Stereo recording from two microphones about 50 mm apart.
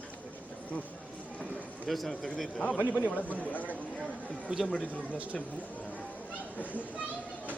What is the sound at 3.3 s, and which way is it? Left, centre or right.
Speech, left.